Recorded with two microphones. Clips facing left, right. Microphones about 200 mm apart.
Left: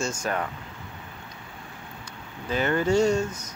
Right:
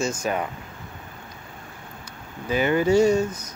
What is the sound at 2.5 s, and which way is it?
Speech, 10° right (ahead or behind).